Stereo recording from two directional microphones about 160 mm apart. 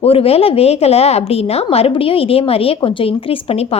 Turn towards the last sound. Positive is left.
turn(degrees=40)  # may be behind; listen again after turning